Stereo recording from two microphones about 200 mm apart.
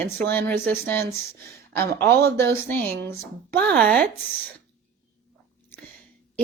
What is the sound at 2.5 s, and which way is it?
Speech, 10° left (ahead or behind).